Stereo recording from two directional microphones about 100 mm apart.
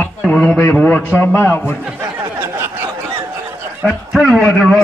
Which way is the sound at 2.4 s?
25° right (ahead or behind).